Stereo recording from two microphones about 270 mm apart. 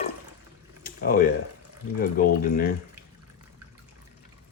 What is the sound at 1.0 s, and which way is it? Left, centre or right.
Speech, left.